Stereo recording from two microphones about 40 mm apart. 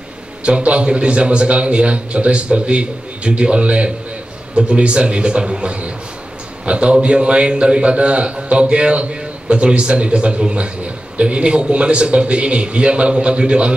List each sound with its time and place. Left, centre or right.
0.4 s a man's voice: right